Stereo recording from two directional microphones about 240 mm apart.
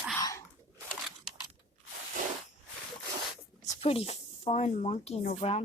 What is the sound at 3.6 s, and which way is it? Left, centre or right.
Speech, left.